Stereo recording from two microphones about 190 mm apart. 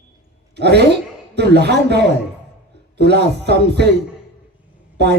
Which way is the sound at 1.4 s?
60° right (ahead or behind).